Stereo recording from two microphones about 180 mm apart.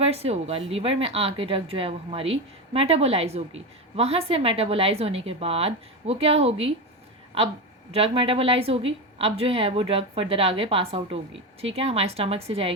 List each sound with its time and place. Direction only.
0.0 s a woman's voice: 35° right (ahead or behind)
7.9 s a woman's voice: 30° right (ahead or behind)